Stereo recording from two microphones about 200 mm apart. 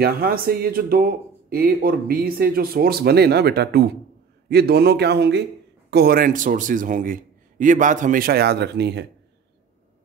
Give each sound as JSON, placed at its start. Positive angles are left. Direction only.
{"t": 0.0, "sound": "a man's voice", "side_deg": -50}